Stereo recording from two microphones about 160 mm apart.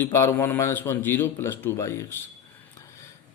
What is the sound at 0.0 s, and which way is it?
Speech, 15° left (ahead or behind).